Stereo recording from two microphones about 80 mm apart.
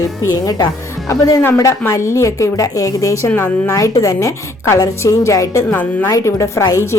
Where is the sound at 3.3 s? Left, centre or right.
Left.